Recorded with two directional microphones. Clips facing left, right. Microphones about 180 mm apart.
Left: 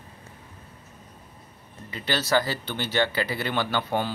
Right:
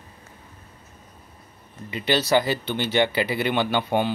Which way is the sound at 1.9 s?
20° right (ahead or behind).